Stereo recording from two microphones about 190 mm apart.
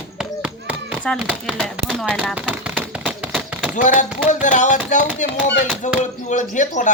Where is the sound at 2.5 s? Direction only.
5° right (ahead or behind).